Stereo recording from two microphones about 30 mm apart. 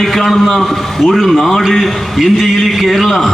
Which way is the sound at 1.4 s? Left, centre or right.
Centre.